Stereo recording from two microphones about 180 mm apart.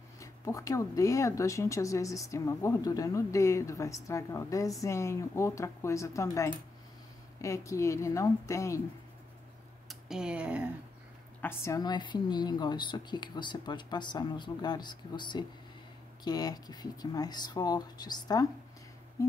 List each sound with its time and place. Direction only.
0.2 s speech: 20° left (ahead or behind)
9.8 s speech: 5° right (ahead or behind)
11.4 s a woman's voice: 15° left (ahead or behind)
19.2 s a sound: 20° left (ahead or behind)